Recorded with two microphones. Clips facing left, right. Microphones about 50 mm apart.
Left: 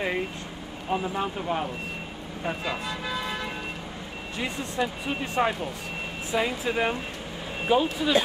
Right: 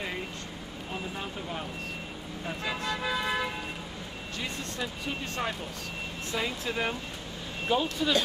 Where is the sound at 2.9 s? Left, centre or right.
Centre.